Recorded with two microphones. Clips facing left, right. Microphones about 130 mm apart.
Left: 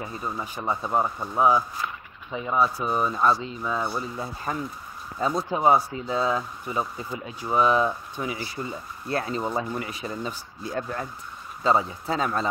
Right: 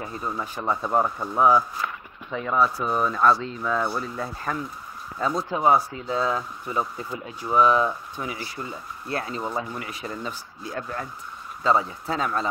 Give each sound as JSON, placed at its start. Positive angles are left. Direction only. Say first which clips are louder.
{"t": 0.0, "sound": "speech", "louder": "right 1 dB", "side_deg": 15}
{"t": 5.3, "sound": "speech", "louder": "even", "side_deg": 20}
{"t": 10.6, "sound": "speech", "louder": "left 2 dB", "side_deg": 35}